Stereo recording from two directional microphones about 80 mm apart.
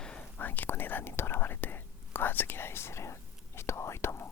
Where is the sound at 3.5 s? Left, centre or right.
Left.